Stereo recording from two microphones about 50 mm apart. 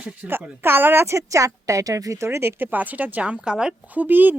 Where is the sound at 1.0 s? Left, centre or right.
Right.